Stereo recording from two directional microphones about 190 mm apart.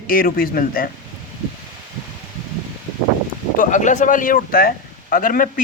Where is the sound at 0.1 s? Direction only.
50° left (ahead or behind).